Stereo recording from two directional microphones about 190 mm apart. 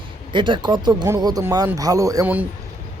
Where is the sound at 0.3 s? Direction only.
25° right (ahead or behind).